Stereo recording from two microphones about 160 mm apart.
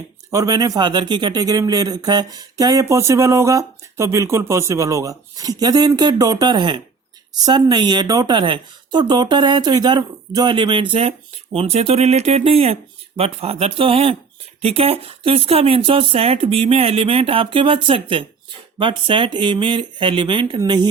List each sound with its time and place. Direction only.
0.3 s speech: 20° right (ahead or behind)